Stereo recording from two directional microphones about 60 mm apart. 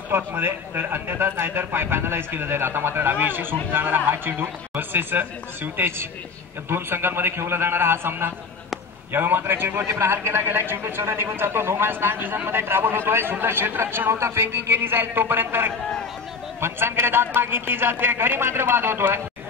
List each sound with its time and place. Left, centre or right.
0.1 s a man's voice: right